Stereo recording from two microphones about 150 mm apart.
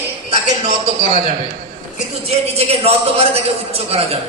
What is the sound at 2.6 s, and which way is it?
Speech, 40° right (ahead or behind).